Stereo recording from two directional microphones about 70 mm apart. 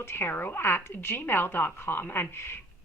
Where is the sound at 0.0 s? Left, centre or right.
Left.